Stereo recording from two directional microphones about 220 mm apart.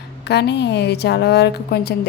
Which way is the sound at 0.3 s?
50° left (ahead or behind).